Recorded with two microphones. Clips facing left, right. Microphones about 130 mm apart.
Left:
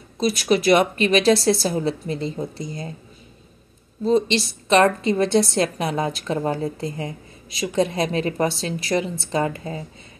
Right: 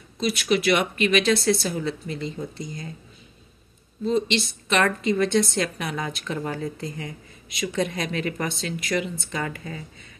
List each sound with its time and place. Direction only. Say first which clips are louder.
0.2 s a woman's voice: left 3 dB; 40° left (ahead or behind)
4.0 s a woman's voice: left 4 dB; 35° left (ahead or behind)